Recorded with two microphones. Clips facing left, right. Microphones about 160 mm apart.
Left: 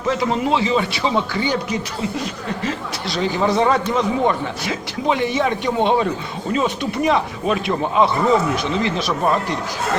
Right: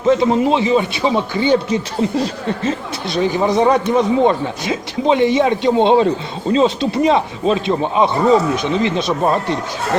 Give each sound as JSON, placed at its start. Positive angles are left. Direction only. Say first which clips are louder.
{"t": 0.0, "sound": "speech", "louder": "right 6 dB", "side_deg": -20}